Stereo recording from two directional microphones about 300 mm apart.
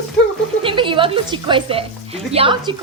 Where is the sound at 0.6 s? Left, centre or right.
Centre.